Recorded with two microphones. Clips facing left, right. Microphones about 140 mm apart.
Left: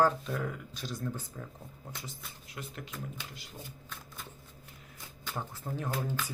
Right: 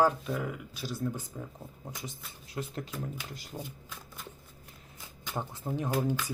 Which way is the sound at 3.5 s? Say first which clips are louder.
Right 7 dB; 45° right (ahead or behind).